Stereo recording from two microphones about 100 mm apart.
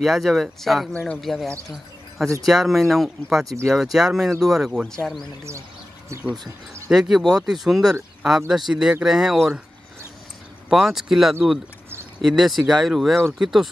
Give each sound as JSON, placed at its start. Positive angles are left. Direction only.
{"t": 0.0, "sound": "speech", "side_deg": 0}
{"t": 6.9, "sound": "speech", "side_deg": 0}
{"t": 10.7, "sound": "speech", "side_deg": -5}